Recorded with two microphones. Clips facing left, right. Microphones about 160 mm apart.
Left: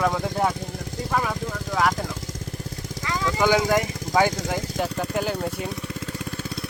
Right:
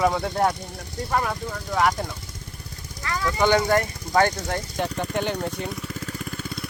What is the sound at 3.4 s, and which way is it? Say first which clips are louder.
Speech: right 1 dB; 5° left (ahead or behind).